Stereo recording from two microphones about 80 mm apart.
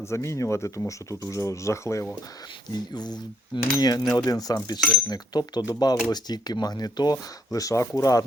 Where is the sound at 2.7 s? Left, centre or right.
Left.